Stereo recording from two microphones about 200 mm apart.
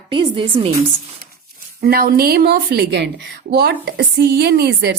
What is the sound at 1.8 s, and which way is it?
A woman's voice, 50° right (ahead or behind).